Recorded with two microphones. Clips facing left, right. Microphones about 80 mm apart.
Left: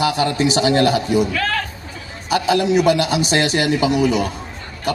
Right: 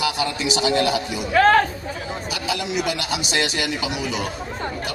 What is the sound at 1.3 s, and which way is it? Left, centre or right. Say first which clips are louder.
Speech: right 7 dB; right.